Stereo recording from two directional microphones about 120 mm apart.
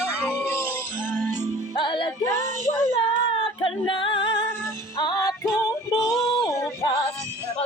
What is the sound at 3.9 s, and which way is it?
Music, 45° left (ahead or behind).